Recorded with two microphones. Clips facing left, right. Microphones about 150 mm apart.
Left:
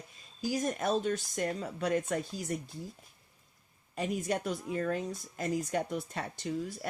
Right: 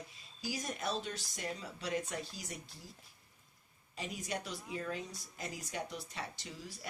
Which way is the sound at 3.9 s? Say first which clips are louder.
Left 9 dB; 50° left (ahead or behind).